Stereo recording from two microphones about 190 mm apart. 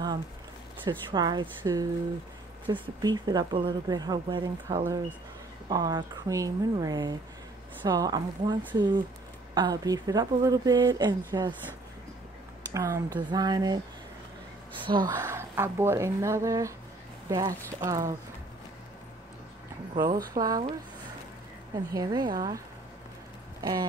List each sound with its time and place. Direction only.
0.8 s speech: 25° right (ahead or behind)
12.7 s speech: 15° right (ahead or behind)
14.9 s speech: 25° right (ahead or behind)
20.0 s speech: 50° right (ahead or behind)
20.3 s speech: 20° right (ahead or behind)
21.7 s speech: 20° right (ahead or behind)
23.6 s speech: 20° right (ahead or behind)